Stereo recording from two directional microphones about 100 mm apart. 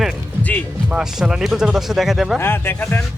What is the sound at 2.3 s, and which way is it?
Speech, 25° left (ahead or behind).